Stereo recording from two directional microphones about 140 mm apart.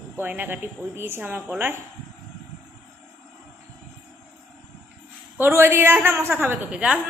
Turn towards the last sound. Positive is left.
turn(degrees=-10)  # may be behind; listen again after turning